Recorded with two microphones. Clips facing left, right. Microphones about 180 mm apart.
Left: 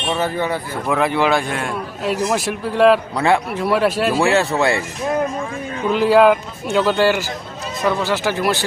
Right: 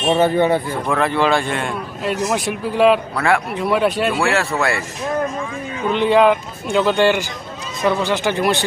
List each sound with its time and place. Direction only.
0.2 s speech: 25° right (ahead or behind)
0.9 s a man's voice: 10° left (ahead or behind)
3.2 s speech: 25° left (ahead or behind)
3.5 s a man's voice: centre (ahead or behind)
4.4 s speech: 20° left (ahead or behind)
5.9 s a man's voice: 5° left (ahead or behind)